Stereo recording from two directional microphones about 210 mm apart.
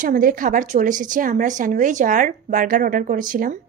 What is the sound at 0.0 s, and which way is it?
A woman's voice, 40° right (ahead or behind).